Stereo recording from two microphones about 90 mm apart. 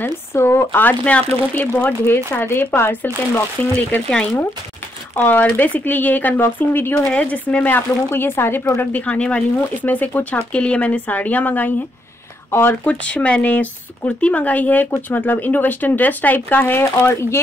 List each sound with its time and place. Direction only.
0.0 s speech: 30° left (ahead or behind)
3.7 s speech: 10° left (ahead or behind); by 12.7 s 25° left (ahead or behind)
13.0 s speech: 15° left (ahead or behind); by 17.4 s 30° left (ahead or behind)